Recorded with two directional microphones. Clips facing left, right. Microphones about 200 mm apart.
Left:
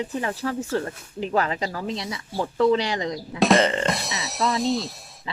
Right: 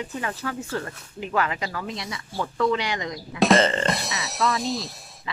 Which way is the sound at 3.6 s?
10° left (ahead or behind).